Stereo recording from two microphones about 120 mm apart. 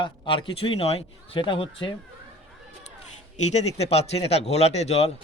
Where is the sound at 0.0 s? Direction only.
45° left (ahead or behind).